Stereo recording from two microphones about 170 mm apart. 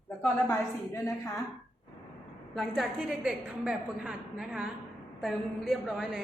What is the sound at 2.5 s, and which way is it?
A woman's voice, centre (ahead or behind).